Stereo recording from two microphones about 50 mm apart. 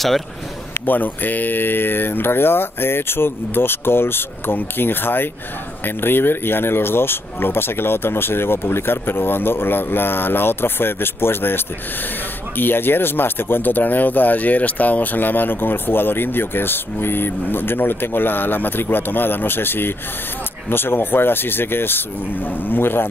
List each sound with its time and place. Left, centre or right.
0.7 s speech: left